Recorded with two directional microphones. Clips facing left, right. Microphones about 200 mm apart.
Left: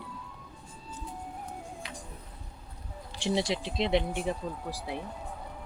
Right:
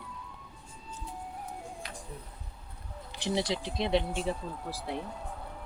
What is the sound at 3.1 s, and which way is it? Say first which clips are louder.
Speech: left 2 dB; 25° left (ahead or behind).